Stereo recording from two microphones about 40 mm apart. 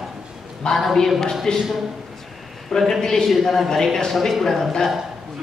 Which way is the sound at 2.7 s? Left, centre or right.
Centre.